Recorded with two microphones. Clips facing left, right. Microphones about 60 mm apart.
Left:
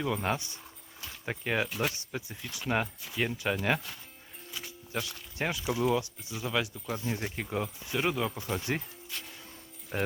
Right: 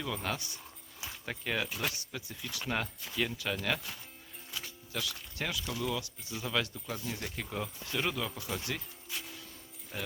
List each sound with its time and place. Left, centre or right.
0.0 s speech: centre
1.6 s speech: centre
1.9 s speech: left; by 3.2 s centre
3.2 s speech: left
4.9 s speech: left
6.3 s speech: centre
6.9 s speech: left
7.5 s speech: centre
9.0 s music: centre
9.9 s speech: left